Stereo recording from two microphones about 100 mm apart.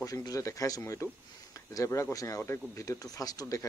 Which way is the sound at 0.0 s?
35° left (ahead or behind).